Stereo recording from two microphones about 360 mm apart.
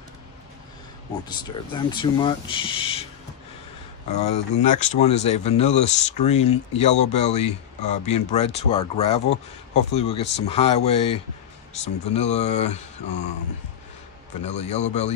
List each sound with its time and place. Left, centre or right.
1.3 s speech: centre
4.1 s speech: centre
14.4 s speech: centre